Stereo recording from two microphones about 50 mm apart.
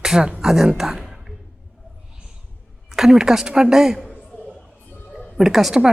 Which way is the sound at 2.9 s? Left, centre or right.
Centre.